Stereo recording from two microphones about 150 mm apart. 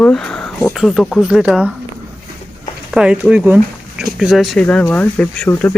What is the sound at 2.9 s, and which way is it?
Speech, 5° right (ahead or behind).